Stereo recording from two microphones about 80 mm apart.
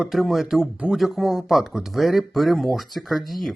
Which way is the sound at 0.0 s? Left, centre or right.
Centre.